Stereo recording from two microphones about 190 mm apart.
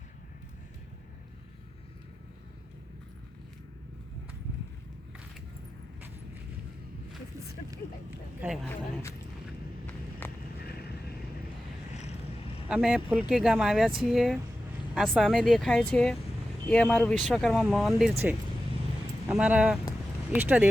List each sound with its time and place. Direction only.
8.6 s speech: 10° left (ahead or behind)
9.8 s a sound: 10° left (ahead or behind)
10.6 s vehicle: 55° left (ahead or behind)
12.6 s speech: 5° right (ahead or behind)
19.3 s speech: 5° right (ahead or behind)